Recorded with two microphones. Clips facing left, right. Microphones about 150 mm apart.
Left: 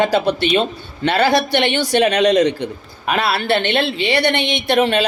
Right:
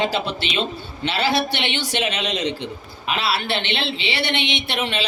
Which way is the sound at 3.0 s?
50° left (ahead or behind).